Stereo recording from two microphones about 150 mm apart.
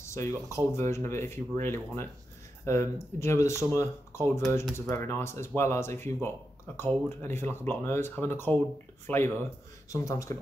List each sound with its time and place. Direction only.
0.0 s speech: 20° left (ahead or behind)